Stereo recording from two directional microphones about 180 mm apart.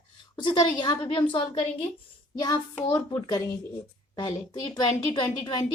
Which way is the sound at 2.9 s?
20° left (ahead or behind).